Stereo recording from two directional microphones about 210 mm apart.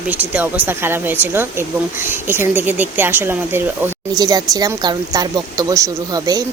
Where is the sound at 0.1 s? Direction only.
5° right (ahead or behind).